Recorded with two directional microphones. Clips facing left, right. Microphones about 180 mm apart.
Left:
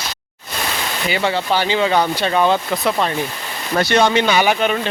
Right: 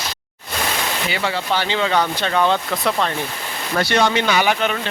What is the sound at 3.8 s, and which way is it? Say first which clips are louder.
Speech: left 3 dB; 20° left (ahead or behind).